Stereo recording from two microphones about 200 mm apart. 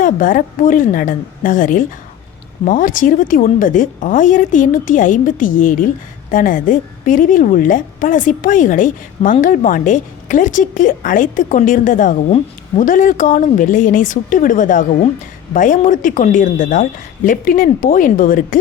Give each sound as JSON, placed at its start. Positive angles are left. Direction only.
{"t": 0.0, "sound": "a woman's voice", "side_deg": 40}